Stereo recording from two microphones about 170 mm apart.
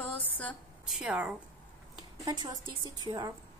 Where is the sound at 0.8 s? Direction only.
5° right (ahead or behind).